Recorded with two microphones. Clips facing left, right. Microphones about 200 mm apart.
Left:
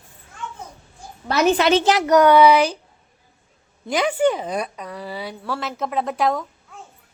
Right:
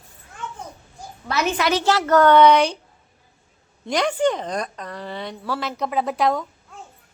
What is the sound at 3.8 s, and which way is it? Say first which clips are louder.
A woman's voice: left 1 dB; 5° left (ahead or behind).